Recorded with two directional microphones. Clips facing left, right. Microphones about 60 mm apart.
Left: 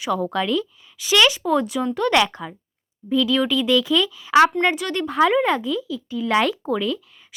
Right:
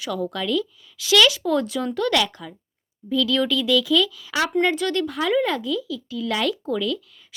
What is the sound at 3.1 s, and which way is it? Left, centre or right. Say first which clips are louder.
A woman's voice: left 2 dB; left.